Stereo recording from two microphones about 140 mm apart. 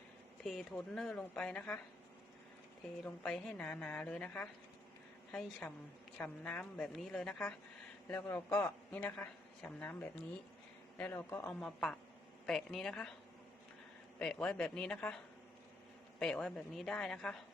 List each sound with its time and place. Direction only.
0.4 s a woman's voice: centre (ahead or behind)
3.0 s a man's voice: centre (ahead or behind)
11.6 s a woman's voice: 5° left (ahead or behind)
14.2 s a man's voice: 5° left (ahead or behind)